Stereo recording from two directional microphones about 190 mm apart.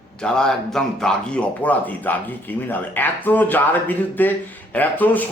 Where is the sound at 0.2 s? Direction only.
5° left (ahead or behind).